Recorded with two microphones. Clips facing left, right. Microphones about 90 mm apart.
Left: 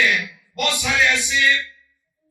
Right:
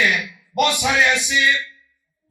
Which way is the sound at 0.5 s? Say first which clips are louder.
Right 4 dB; 20° right (ahead or behind).